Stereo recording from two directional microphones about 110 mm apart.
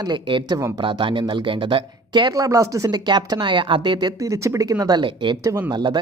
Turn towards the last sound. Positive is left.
turn(degrees=-40)  # may be behind; listen again after turning